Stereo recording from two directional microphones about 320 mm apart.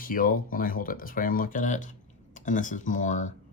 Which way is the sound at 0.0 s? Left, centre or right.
Left.